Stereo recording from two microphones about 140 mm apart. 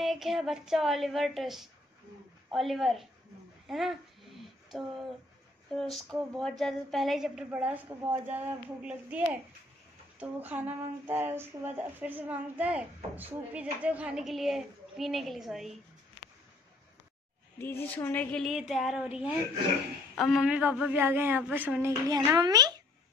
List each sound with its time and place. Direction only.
0.0 s a woman's voice: centre (ahead or behind)
3.6 s a sound: centre (ahead or behind)
5.8 s a woman's voice: centre (ahead or behind)
17.6 s speech: 15° left (ahead or behind)
18.5 s a woman's voice: 5° right (ahead or behind); by 22.8 s 30° right (ahead or behind)